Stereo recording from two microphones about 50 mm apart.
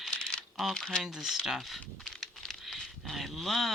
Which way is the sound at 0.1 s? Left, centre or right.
Centre.